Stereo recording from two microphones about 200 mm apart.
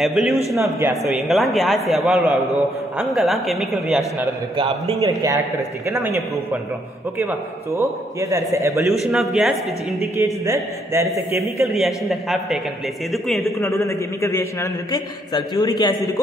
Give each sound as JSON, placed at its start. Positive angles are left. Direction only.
{"t": 0.0, "sound": "a man's voice", "side_deg": 0}
{"t": 4.6, "sound": "a man's voice", "side_deg": -30}
{"t": 5.0, "sound": "a man's voice", "side_deg": -15}
{"t": 9.0, "sound": "a man's voice", "side_deg": 0}
{"t": 10.1, "sound": "a man's voice", "side_deg": -15}
{"t": 11.6, "sound": "a man's voice", "side_deg": 0}
{"t": 13.6, "sound": "a man's voice", "side_deg": 15}